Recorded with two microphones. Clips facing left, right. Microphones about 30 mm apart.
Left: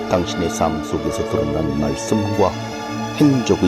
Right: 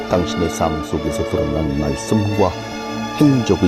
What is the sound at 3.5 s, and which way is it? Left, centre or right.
Speech, right.